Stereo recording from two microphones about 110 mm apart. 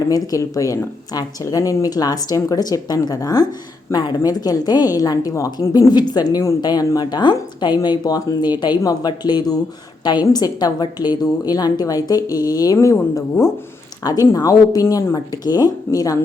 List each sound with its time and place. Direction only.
0.1 s speech: 30° left (ahead or behind)